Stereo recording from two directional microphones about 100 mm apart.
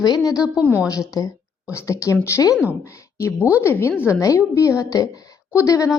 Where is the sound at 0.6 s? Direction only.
20° right (ahead or behind).